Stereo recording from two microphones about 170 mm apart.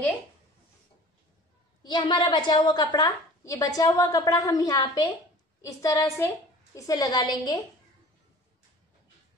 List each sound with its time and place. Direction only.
1.8 s a woman's voice: 25° left (ahead or behind)